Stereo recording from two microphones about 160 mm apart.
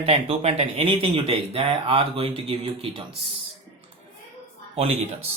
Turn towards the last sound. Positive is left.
turn(degrees=-40)  # may be behind; listen again after turning